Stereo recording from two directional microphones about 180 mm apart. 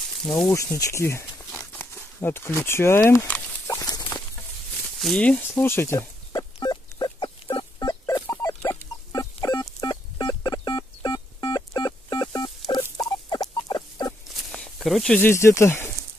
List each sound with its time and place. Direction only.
0.5 s speech: 15° left (ahead or behind)
3.6 s rodents: 20° left (ahead or behind)
4.9 s speech: 5° left (ahead or behind)
5.5 s a sound: 15° left (ahead or behind)
12.9 s rodents: 20° left (ahead or behind)
14.3 s speech: centre (ahead or behind)